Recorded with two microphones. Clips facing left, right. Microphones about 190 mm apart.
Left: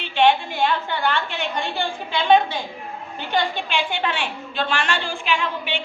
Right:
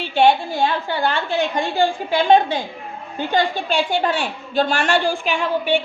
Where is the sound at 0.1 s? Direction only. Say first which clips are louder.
Right 2 dB; 35° right (ahead or behind).